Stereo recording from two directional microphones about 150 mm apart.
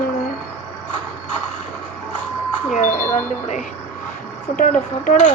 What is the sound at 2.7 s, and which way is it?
Speech, 60° left (ahead or behind).